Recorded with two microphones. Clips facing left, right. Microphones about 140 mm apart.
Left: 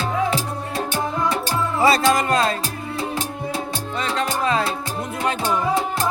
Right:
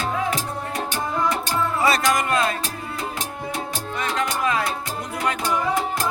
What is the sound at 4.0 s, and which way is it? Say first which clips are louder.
Music: left 1 dB; 30° left (ahead or behind).